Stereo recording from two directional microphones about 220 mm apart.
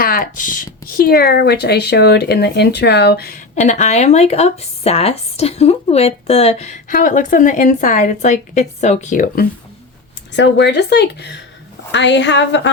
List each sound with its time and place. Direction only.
0.0 s speech: 40° left (ahead or behind)
10.3 s speech: 50° left (ahead or behind)